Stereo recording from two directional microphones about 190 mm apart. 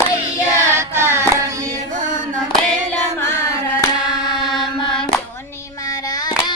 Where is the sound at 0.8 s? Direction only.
10° right (ahead or behind).